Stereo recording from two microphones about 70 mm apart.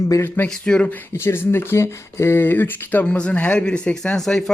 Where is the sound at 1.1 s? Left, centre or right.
Left.